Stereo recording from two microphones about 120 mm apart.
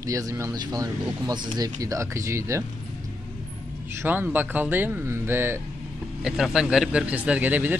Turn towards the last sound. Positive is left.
turn(degrees=-15)  # may be behind; listen again after turning